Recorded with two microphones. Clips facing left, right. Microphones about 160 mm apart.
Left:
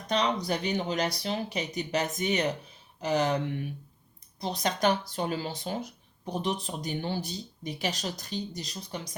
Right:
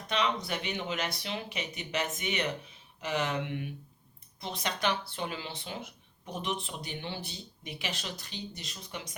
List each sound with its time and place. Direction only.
0.1 s speech: 40° left (ahead or behind)